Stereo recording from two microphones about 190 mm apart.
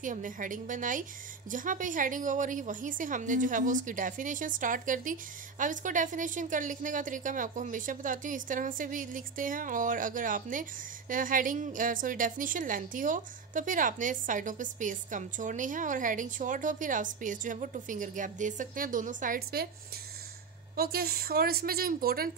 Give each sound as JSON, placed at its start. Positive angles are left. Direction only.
{"t": 0.0, "sound": "a woman's voice", "side_deg": -45}
{"t": 20.7, "sound": "a woman's voice", "side_deg": -55}